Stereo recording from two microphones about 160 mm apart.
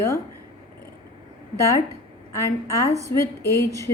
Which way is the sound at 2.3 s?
15° left (ahead or behind).